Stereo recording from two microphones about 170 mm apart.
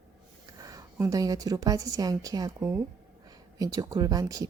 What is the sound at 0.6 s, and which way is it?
A woman's voice, 20° right (ahead or behind).